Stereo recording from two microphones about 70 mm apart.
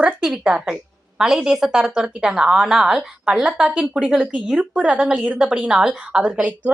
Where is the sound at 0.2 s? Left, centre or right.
Centre.